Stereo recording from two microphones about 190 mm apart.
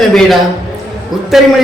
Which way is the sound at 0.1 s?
Centre (ahead or behind).